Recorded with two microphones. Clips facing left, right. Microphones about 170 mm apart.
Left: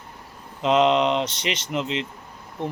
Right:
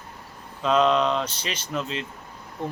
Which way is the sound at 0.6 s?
20° left (ahead or behind).